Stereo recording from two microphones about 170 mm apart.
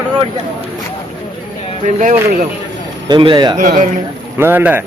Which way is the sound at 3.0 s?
30° right (ahead or behind).